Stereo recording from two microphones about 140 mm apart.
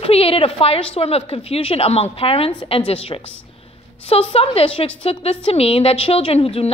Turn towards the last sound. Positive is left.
turn(degrees=45)  # may be behind; listen again after turning